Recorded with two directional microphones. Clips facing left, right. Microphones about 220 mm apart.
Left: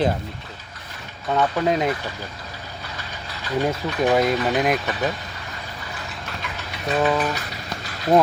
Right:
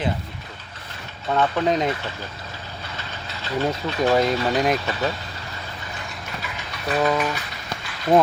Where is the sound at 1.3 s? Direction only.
5° left (ahead or behind).